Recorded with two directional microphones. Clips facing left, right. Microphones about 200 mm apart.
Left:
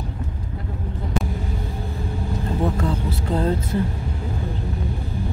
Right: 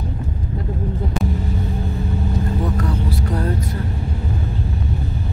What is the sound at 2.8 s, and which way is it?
Vehicle, 25° left (ahead or behind).